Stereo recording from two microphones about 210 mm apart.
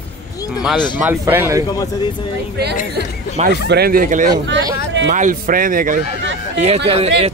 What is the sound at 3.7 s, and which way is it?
Speech, 45° right (ahead or behind).